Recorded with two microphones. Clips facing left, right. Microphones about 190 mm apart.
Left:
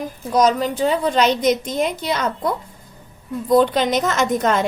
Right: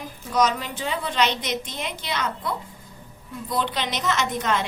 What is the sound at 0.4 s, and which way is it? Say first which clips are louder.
A woman's voice: left 9 dB; 40° left (ahead or behind).